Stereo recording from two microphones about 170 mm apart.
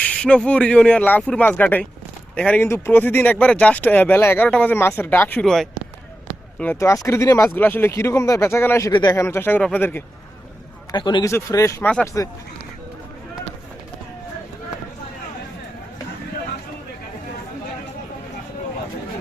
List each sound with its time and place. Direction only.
0.0 s speech: 5° left (ahead or behind)
6.6 s speech: 15° left (ahead or behind)
10.9 s a man's voice: 25° left (ahead or behind)
11.3 s speech: 15° left (ahead or behind)